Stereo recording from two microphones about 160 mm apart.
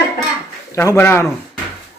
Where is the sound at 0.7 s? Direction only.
15° left (ahead or behind).